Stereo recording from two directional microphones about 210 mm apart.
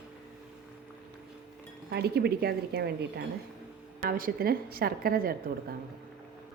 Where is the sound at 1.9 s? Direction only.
50° right (ahead or behind).